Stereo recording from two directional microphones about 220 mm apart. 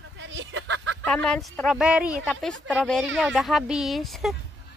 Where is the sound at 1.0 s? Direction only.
5° left (ahead or behind).